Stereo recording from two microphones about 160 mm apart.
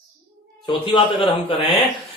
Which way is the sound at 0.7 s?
30° left (ahead or behind).